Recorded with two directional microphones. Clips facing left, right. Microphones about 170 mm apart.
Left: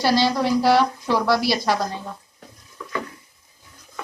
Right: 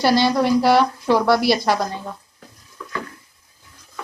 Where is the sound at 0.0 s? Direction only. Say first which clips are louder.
Right 3 dB; 55° right (ahead or behind).